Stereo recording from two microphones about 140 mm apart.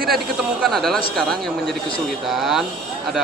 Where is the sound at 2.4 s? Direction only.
Centre (ahead or behind).